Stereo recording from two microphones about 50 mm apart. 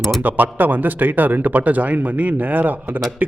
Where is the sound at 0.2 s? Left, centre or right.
Right.